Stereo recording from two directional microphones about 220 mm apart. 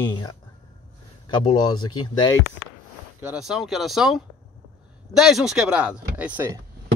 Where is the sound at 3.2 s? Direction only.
5° right (ahead or behind).